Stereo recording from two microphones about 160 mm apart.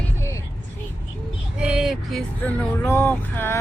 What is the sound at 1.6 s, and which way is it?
Speech, 5° right (ahead or behind).